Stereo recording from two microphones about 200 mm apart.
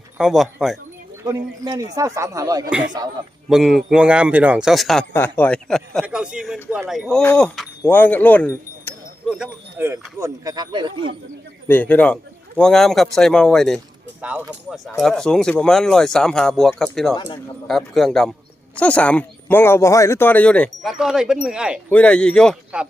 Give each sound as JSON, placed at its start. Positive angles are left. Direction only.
{"t": 0.2, "sound": "a man's voice", "side_deg": 0}
{"t": 1.2, "sound": "speech", "side_deg": -20}
{"t": 3.5, "sound": "a man's voice", "side_deg": 0}
{"t": 9.4, "sound": "speech", "side_deg": -10}
{"t": 11.7, "sound": "a man's voice", "side_deg": 10}
{"t": 17.2, "sound": "speech", "side_deg": 20}
{"t": 17.7, "sound": "a man's voice", "side_deg": 0}
{"t": 21.8, "sound": "a man's voice", "side_deg": 5}